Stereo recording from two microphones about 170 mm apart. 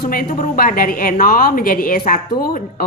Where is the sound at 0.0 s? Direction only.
60° left (ahead or behind).